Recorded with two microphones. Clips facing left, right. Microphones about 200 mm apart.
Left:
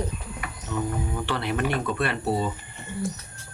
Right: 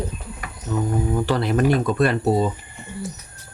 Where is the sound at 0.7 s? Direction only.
40° right (ahead or behind).